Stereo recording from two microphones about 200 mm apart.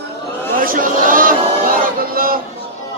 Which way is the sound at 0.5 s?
45° right (ahead or behind).